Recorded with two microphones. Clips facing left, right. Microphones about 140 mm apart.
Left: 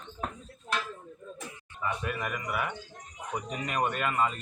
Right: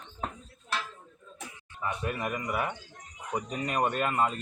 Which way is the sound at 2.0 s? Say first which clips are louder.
Right 2 dB; 35° right (ahead or behind).